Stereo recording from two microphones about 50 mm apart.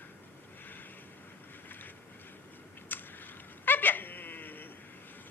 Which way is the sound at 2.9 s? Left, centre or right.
Left.